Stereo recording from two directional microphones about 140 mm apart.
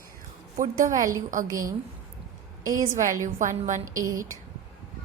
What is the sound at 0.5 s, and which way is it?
Speech, 70° right (ahead or behind).